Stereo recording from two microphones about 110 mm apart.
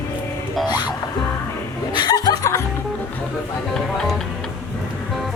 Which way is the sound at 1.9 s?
40° left (ahead or behind).